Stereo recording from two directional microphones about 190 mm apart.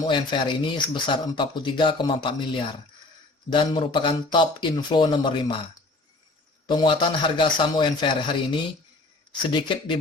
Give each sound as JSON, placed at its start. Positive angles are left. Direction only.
{"t": 0.0, "sound": "speech", "side_deg": 25}
{"t": 6.7, "sound": "speech", "side_deg": 25}